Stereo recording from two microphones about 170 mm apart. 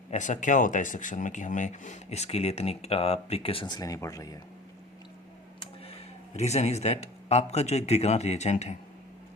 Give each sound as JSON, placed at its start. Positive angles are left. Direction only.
{"t": 0.1, "sound": "speech", "side_deg": 45}
{"t": 6.3, "sound": "speech", "side_deg": 40}